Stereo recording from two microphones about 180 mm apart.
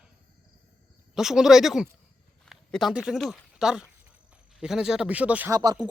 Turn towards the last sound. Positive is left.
turn(degrees=-20)  # may be behind; listen again after turning